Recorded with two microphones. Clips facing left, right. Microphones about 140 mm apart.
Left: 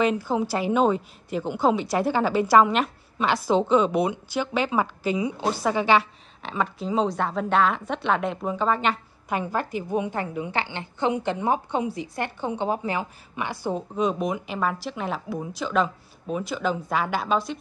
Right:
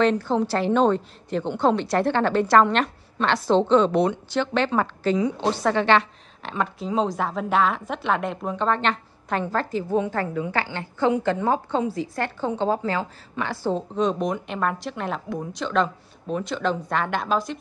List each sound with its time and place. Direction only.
0.0 s a woman's voice: 10° left (ahead or behind)